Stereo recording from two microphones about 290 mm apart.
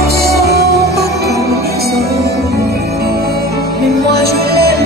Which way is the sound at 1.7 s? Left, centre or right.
Right.